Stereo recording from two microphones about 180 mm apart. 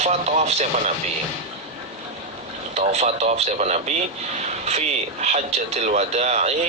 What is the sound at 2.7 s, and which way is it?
Speech, 40° right (ahead or behind).